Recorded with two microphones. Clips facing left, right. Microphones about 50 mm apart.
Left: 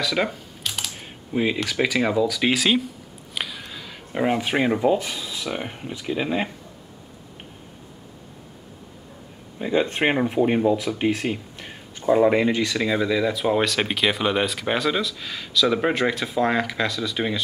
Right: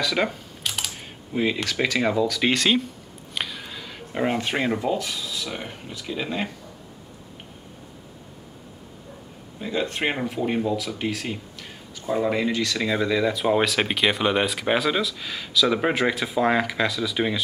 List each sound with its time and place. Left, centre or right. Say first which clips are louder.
0.0 s speech: even; centre
9.6 s speech: left 4 dB; left
12.7 s speech: left 1 dB; centre